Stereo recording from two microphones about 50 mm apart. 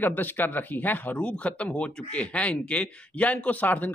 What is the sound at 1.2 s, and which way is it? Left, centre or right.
Speech, left.